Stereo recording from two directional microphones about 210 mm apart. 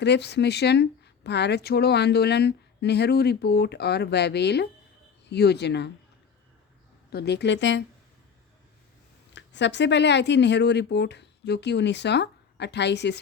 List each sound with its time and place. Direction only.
0.0 s speech: 55° left (ahead or behind)
7.1 s speech: 50° left (ahead or behind)
9.3 s speech: 55° left (ahead or behind)